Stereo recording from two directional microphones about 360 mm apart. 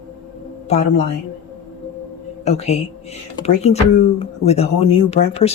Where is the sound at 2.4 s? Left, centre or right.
Centre.